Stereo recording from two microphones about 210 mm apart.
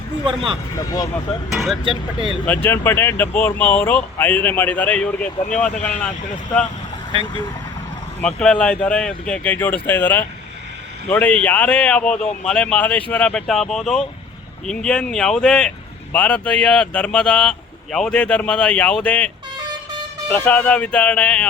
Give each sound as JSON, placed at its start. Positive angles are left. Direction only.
{"t": 0.8, "sound": "speech", "side_deg": 15}
{"t": 1.5, "sound": "speech", "side_deg": 0}
{"t": 1.8, "sound": "speech", "side_deg": -25}
{"t": 2.5, "sound": "speech", "side_deg": 10}
{"t": 7.1, "sound": "speech", "side_deg": -25}
{"t": 8.2, "sound": "speech", "side_deg": 5}
{"t": 20.4, "sound": "speech", "side_deg": 5}